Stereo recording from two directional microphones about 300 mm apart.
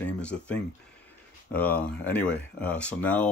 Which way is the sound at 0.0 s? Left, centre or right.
Centre.